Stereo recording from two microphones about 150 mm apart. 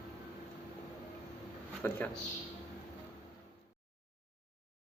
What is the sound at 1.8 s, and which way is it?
Speech, 15° left (ahead or behind).